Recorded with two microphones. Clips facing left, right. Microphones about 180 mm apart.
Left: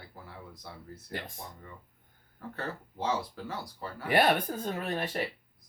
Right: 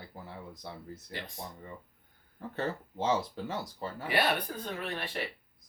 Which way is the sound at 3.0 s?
20° right (ahead or behind).